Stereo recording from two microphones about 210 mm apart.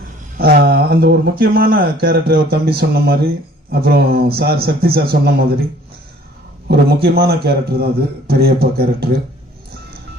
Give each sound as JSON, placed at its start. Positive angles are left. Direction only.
{"t": 0.3, "sound": "speech", "side_deg": -45}
{"t": 6.7, "sound": "speech", "side_deg": -45}